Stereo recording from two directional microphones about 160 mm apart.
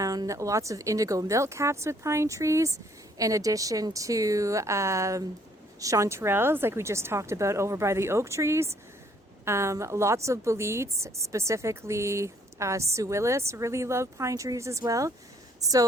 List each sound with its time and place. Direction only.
0.0 s a woman's voice: 20° right (ahead or behind)